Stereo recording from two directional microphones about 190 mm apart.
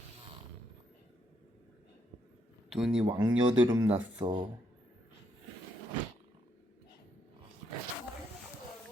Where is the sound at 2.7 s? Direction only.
5° right (ahead or behind).